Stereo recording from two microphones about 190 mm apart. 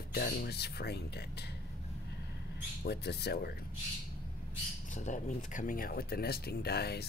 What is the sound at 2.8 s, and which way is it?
Speech, 60° left (ahead or behind).